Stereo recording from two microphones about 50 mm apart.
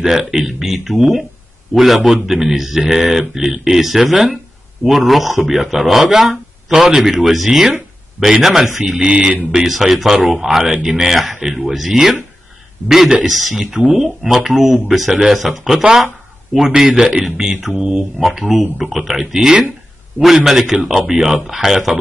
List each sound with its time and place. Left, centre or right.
0.0 s a man's voice: centre
9.0 s mantra: centre
9.5 s a man's voice: centre